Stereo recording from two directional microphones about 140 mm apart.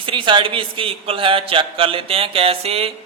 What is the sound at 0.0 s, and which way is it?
A man's voice, 35° right (ahead or behind).